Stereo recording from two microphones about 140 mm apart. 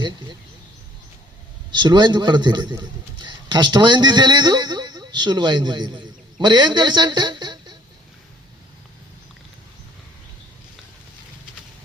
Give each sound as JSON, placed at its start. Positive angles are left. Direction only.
{"t": 1.7, "sound": "a man's voice", "side_deg": -30}